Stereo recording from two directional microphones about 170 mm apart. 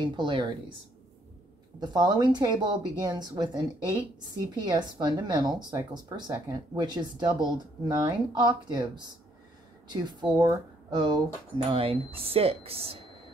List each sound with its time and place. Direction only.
0.0 s speech: 25° right (ahead or behind)
1.8 s speech: 25° right (ahead or behind)
4.6 s speech: 25° right (ahead or behind)
10.3 s speech: 20° right (ahead or behind)